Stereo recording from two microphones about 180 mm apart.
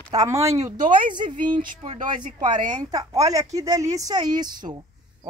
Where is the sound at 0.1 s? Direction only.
20° right (ahead or behind).